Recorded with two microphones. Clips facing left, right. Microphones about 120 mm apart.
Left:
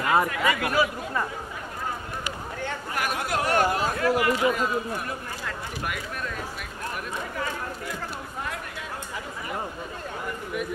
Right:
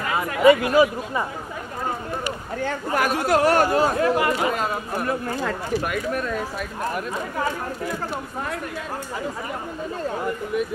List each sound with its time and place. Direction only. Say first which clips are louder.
0.3 s speech: right 10 dB; 30° right (ahead or behind)
2.6 s speech: right 7 dB; 40° right (ahead or behind)
4.4 s speech: even; 65° right (ahead or behind)